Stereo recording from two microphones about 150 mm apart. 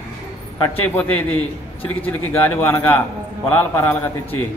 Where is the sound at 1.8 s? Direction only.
10° left (ahead or behind).